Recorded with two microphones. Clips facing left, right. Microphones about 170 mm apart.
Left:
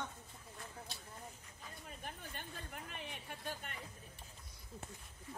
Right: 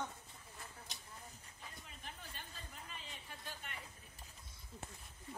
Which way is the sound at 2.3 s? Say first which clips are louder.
Left 5 dB; 60° left (ahead or behind).